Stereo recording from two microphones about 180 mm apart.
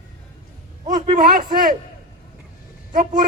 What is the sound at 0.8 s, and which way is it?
Speech, 45° right (ahead or behind).